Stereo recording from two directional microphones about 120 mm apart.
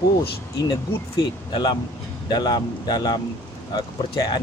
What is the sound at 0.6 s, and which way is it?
Speech, 35° left (ahead or behind).